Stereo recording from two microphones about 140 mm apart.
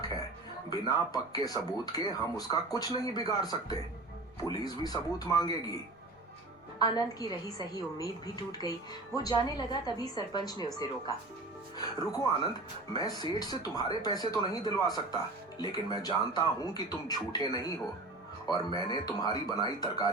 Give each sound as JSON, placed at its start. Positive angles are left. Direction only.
{"t": 0.7, "sound": "speech", "side_deg": 30}
{"t": 6.7, "sound": "speech", "side_deg": 30}